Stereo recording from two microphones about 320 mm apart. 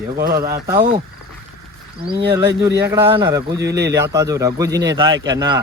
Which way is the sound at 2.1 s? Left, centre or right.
Right.